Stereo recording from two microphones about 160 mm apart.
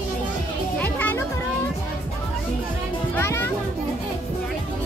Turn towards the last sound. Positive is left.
turn(degrees=15)  # may be behind; listen again after turning